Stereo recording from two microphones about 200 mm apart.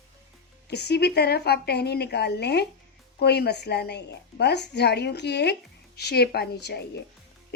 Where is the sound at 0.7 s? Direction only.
55° left (ahead or behind).